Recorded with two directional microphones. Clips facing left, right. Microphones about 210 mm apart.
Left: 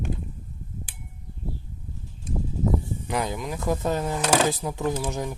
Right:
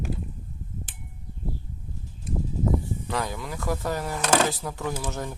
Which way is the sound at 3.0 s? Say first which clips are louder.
Left 6 dB; 20° left (ahead or behind).